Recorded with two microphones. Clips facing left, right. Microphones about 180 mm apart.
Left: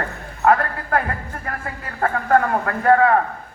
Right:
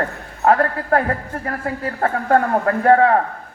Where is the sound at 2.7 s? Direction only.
35° right (ahead or behind).